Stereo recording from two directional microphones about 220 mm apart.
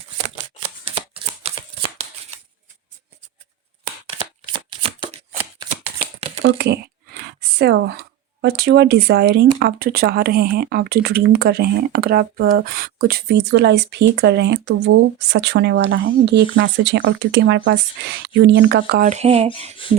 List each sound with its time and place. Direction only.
0.9 s shuffling cards: 25° right (ahead or behind)
4.8 s shuffling cards: 25° right (ahead or behind)
6.4 s speech: 50° right (ahead or behind); by 19.5 s 30° right (ahead or behind)
19.8 s speech: 25° left (ahead or behind)